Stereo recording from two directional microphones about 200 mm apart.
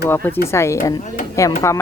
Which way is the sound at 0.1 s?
10° left (ahead or behind).